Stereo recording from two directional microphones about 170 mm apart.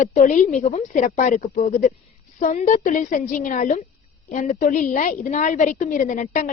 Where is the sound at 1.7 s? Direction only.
55° left (ahead or behind).